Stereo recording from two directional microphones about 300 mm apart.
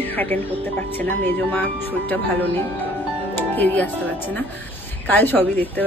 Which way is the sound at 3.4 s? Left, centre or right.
Centre.